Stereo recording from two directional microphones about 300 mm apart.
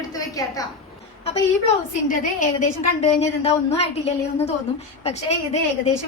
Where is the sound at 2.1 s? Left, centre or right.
Left.